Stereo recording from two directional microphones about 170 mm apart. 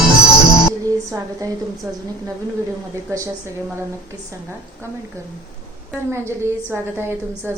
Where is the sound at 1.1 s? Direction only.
20° right (ahead or behind).